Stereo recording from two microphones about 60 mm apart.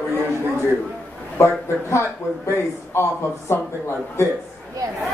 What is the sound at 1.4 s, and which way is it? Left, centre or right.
A man's voice, left.